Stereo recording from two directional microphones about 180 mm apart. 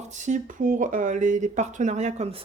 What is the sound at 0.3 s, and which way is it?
Speech, 45° right (ahead or behind).